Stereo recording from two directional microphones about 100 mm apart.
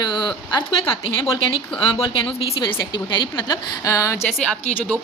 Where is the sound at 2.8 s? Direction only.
50° left (ahead or behind); by 4.1 s 35° left (ahead or behind).